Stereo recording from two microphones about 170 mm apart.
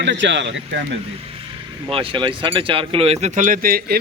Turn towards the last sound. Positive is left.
turn(degrees=-60)  # may be behind; listen again after turning